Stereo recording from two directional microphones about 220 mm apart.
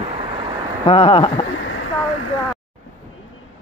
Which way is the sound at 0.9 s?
25° left (ahead or behind).